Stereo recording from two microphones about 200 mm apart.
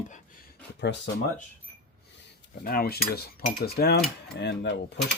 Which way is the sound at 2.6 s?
50° left (ahead or behind).